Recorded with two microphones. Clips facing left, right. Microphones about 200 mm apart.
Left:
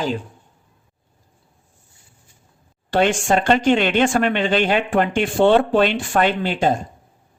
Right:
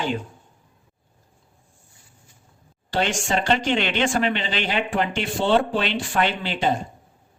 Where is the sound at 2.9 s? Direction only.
55° left (ahead or behind).